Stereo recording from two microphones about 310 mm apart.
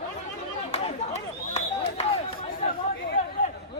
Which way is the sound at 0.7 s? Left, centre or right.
Left.